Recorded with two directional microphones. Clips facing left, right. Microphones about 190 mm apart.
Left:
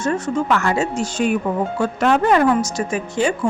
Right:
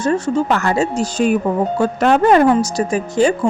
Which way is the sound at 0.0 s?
35° right (ahead or behind).